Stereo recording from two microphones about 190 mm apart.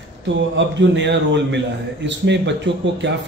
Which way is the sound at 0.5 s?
70° right (ahead or behind).